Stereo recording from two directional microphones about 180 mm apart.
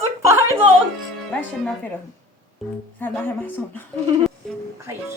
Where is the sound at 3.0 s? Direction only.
10° left (ahead or behind).